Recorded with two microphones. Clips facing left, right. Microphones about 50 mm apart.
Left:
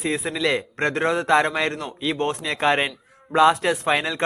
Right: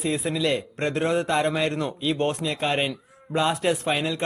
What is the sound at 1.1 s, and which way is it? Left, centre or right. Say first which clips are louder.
A man's voice: left 5 dB; left.